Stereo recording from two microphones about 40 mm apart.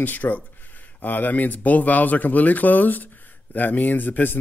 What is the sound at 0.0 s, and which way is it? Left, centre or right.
Speech, left.